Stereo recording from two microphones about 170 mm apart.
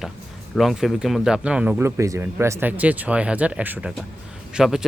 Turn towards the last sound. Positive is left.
turn(degrees=-5)  # may be behind; listen again after turning